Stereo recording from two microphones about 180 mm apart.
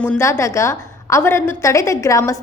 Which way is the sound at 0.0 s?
10° left (ahead or behind).